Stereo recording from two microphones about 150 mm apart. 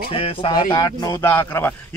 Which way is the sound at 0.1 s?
35° left (ahead or behind).